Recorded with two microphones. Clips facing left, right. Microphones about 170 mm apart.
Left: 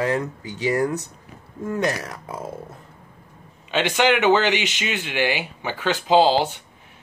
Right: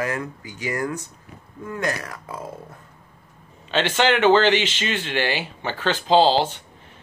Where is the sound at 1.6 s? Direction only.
20° left (ahead or behind).